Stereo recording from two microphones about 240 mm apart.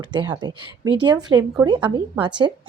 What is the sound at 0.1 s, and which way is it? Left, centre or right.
Speech, centre.